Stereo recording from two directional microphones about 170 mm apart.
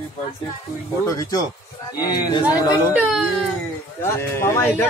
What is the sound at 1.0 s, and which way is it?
A man's voice, 20° left (ahead or behind).